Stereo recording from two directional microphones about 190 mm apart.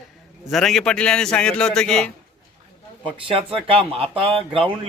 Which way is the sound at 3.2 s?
30° right (ahead or behind).